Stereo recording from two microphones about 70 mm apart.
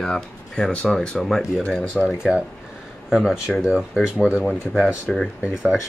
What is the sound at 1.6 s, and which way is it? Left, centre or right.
Speech, centre.